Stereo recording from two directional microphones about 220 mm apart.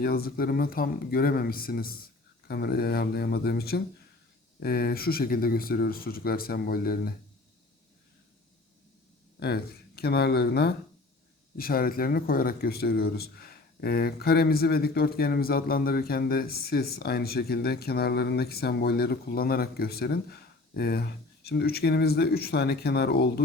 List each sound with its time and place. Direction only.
0.0 s speech: 45° left (ahead or behind)
9.4 s speech: 45° left (ahead or behind)